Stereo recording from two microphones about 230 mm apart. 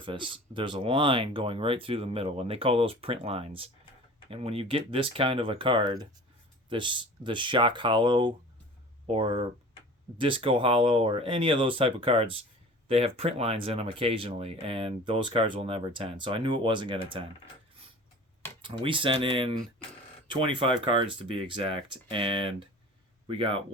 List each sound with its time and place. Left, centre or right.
0.0 s speech: right
18.6 s speech: right